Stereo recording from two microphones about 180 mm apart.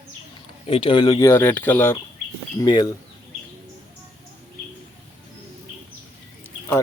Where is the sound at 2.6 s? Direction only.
25° left (ahead or behind).